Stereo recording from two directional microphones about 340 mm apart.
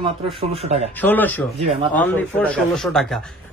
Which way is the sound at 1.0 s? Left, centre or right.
Centre.